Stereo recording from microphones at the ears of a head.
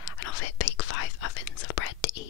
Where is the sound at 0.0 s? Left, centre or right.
Left.